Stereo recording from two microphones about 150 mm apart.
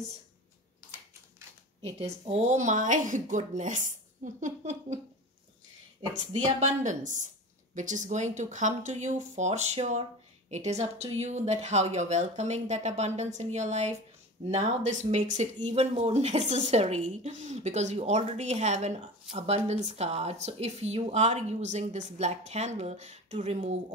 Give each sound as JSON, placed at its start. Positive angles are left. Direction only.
{"t": 1.8, "sound": "speech", "side_deg": -40}
{"t": 6.3, "sound": "speech", "side_deg": -50}